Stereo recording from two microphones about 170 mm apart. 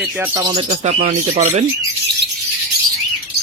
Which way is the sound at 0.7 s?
40° right (ahead or behind).